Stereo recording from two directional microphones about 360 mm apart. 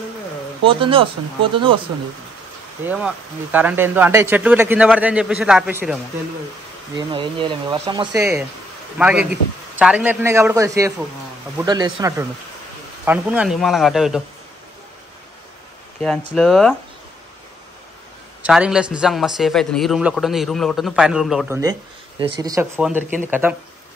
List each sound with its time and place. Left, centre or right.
0.7 s speech: centre
2.8 s a man's voice: centre
7.0 s a man's voice: centre
16.3 s a man's voice: centre
18.4 s a man's voice: centre